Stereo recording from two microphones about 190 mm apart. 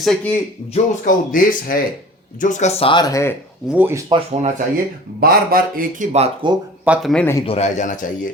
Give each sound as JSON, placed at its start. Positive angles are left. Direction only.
{"t": 0.0, "sound": "speech", "side_deg": 0}
{"t": 0.7, "sound": "speech", "side_deg": 45}
{"t": 3.7, "sound": "speech", "side_deg": -10}
{"t": 4.1, "sound": "speech", "side_deg": -35}
{"t": 5.2, "sound": "speech", "side_deg": -50}
{"t": 6.1, "sound": "speech", "side_deg": -30}
{"t": 6.8, "sound": "speech", "side_deg": -5}
{"t": 7.4, "sound": "speech", "side_deg": 35}